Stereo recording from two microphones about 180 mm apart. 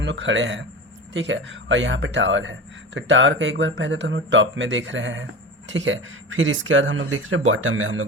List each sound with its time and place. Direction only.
0.0 s speech: 90° right